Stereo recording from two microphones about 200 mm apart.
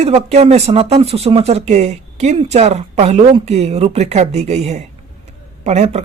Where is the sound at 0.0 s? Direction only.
35° right (ahead or behind).